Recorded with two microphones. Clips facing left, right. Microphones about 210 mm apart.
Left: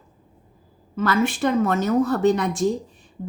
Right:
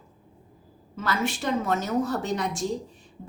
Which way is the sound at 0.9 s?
55° left (ahead or behind).